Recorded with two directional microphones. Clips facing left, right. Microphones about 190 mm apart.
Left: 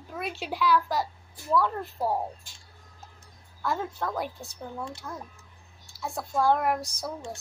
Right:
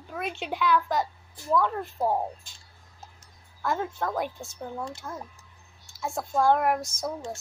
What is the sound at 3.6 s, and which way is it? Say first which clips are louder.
A woman's voice: right 1 dB; centre (ahead or behind).